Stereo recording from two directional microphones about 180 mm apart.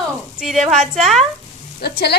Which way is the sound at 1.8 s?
65° left (ahead or behind).